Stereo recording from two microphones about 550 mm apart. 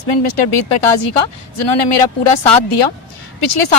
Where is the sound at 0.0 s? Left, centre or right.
Left.